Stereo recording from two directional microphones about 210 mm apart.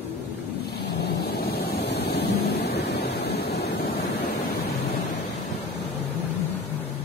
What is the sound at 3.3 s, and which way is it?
Waves, 50° left (ahead or behind).